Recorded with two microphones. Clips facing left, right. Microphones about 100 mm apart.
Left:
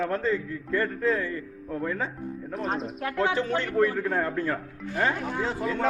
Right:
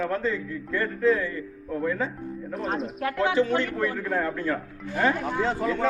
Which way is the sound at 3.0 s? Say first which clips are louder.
Right 3 dB; 35° left (ahead or behind).